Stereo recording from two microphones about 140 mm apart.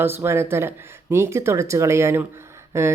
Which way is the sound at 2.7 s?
20° right (ahead or behind).